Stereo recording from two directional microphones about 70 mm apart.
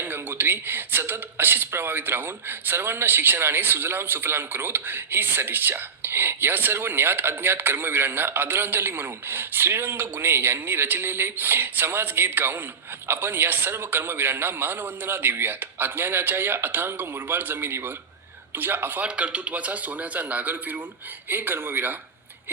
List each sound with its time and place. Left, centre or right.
0.0 s a man's voice: right
19.0 s a man's voice: centre; by 21.9 s right